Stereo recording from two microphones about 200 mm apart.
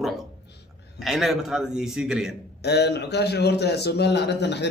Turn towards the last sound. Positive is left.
turn(degrees=60)  # may be behind; listen again after turning